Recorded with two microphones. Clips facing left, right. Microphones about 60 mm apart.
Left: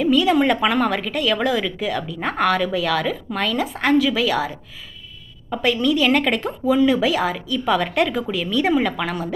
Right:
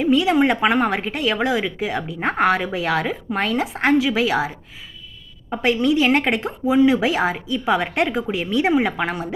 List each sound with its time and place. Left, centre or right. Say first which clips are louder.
0.0 s a woman's voice: even; centre